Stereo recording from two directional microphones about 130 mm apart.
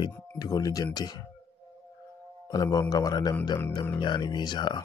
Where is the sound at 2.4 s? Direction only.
30° left (ahead or behind).